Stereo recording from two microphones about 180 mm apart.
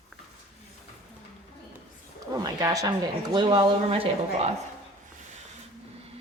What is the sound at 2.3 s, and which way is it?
Speech, 20° right (ahead or behind).